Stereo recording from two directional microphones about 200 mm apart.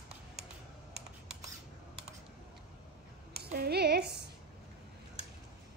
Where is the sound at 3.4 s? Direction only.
50° right (ahead or behind).